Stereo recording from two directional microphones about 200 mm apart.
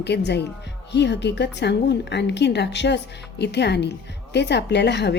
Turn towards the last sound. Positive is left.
turn(degrees=60)  # may be behind; listen again after turning